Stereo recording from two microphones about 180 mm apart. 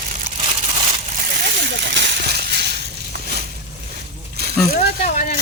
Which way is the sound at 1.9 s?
70° right (ahead or behind).